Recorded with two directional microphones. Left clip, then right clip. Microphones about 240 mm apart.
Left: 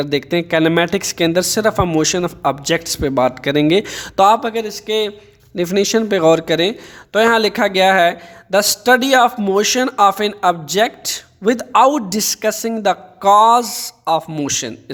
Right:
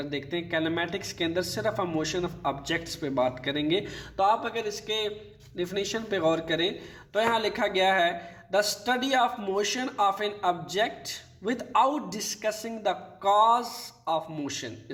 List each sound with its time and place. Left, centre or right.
0.0 s a man's voice: left